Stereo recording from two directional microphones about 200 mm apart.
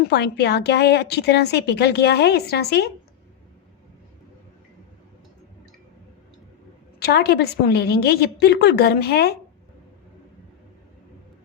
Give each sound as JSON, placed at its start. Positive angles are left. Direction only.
{"t": 0.1, "sound": "a woman's voice", "side_deg": 55}
{"t": 7.0, "sound": "a woman's voice", "side_deg": 50}